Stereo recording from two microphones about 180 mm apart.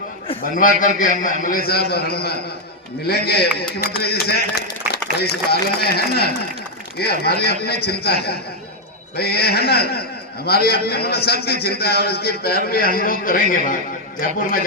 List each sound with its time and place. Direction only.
0.5 s a man's voice: 45° left (ahead or behind)